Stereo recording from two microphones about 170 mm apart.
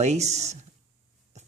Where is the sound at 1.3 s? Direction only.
40° right (ahead or behind).